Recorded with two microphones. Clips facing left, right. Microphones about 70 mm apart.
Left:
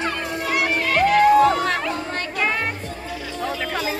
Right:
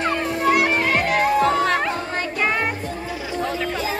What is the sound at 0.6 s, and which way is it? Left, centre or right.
Music, right.